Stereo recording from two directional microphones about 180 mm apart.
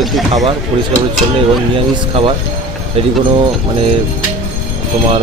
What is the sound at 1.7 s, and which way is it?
Speech, 30° right (ahead or behind).